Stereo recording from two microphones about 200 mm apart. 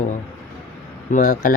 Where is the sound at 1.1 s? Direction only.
40° left (ahead or behind).